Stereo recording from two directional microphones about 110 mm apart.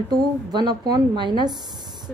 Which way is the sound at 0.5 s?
40° right (ahead or behind).